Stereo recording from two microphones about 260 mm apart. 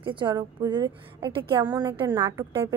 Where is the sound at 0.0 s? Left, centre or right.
Centre.